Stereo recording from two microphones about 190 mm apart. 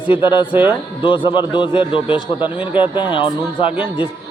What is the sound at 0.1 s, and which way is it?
Speech, 25° left (ahead or behind).